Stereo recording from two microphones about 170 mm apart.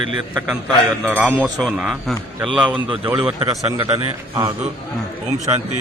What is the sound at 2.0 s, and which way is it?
Speech, 5° right (ahead or behind).